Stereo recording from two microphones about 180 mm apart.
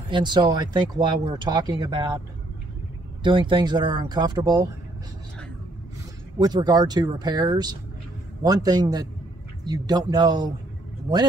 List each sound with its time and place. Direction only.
0.1 s speech: 25° right (ahead or behind)
3.3 s speech: 25° right (ahead or behind)
6.4 s speech: 20° right (ahead or behind)